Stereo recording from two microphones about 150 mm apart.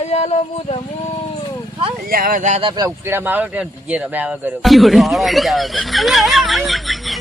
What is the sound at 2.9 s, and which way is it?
A man's voice, 15° right (ahead or behind).